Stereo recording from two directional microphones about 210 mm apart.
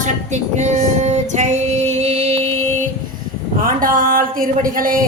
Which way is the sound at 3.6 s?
40° right (ahead or behind).